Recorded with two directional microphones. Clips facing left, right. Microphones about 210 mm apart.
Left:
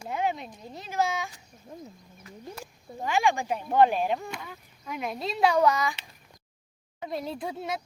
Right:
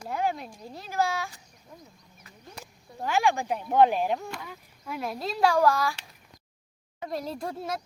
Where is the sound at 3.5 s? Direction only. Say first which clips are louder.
Right 1 dB; 10° right (ahead or behind).